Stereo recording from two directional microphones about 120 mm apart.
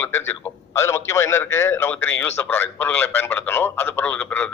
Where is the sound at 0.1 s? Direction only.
20° left (ahead or behind).